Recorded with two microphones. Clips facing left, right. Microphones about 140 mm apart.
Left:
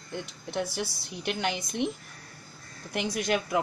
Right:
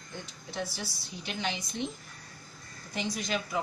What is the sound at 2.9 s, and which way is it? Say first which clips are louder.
Speech: left 5 dB; 60° left (ahead or behind).